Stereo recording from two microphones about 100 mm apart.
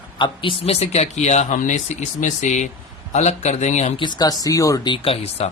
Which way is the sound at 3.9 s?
50° left (ahead or behind).